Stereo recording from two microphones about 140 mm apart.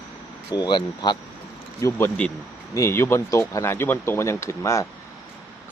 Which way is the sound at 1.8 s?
15° left (ahead or behind).